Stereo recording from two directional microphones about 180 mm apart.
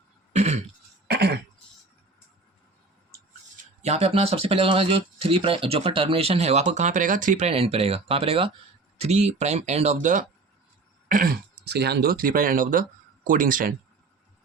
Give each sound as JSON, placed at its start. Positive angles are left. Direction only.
{"t": 0.3, "sound": "throat clearing", "side_deg": -40}
{"t": 1.0, "sound": "cough", "side_deg": -65}
{"t": 3.8, "sound": "speech", "side_deg": -35}
{"t": 11.1, "sound": "speech", "side_deg": -55}